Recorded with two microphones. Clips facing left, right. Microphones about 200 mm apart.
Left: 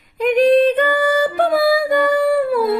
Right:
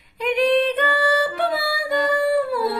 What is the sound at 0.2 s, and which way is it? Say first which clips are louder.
Music: left 6 dB; 45° left (ahead or behind).